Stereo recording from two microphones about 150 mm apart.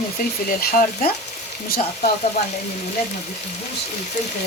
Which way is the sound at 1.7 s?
60° left (ahead or behind).